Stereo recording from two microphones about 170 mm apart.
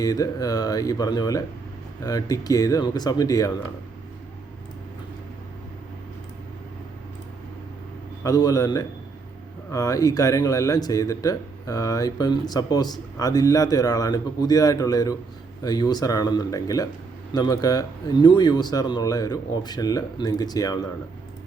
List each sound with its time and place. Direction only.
0.0 s speech: 20° left (ahead or behind)
8.2 s speech: 20° left (ahead or behind)